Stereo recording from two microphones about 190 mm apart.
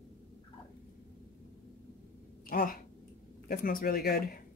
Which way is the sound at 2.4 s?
50° left (ahead or behind).